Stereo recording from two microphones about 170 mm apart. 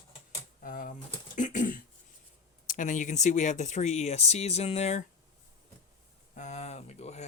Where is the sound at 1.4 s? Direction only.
50° left (ahead or behind).